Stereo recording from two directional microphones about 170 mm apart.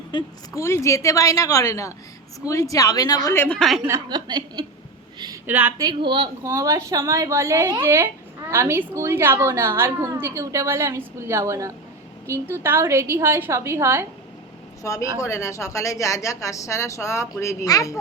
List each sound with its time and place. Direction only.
0.1 s a woman's voice: 30° left (ahead or behind)
0.6 s a woman's voice: 15° left (ahead or behind); by 3.8 s centre (ahead or behind)
3.8 s speech: 20° right (ahead or behind)
5.5 s a woman's voice: 10° right (ahead or behind)
6.1 s speech: 30° right (ahead or behind)
6.4 s a woman's voice: 20° right (ahead or behind)
14.8 s a woman's voice: 15° left (ahead or behind)